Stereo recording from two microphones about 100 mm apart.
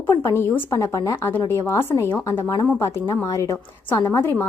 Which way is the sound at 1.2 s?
20° left (ahead or behind).